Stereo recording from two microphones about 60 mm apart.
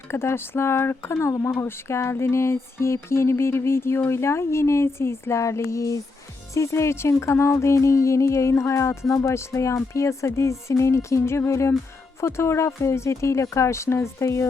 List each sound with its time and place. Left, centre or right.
0.1 s speech: left